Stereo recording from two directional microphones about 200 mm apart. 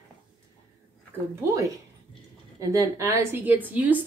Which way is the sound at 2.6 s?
15° right (ahead or behind).